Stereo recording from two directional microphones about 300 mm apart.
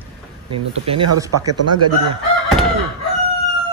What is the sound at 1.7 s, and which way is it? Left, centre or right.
Chicken, right.